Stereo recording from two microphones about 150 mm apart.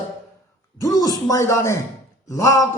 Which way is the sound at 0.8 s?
25° left (ahead or behind).